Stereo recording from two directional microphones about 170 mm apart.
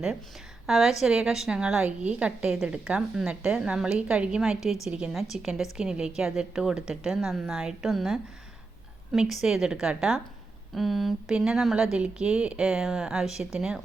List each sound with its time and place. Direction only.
0.7 s a woman's voice: centre (ahead or behind)